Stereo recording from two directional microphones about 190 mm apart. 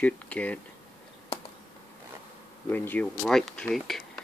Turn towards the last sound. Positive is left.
turn(degrees=0)  # may be behind; listen again after turning